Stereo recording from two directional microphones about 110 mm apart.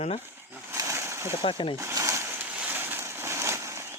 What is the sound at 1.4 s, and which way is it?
Speech, 50° left (ahead or behind).